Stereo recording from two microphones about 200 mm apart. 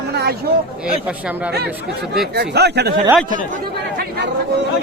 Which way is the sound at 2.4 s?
55° right (ahead or behind).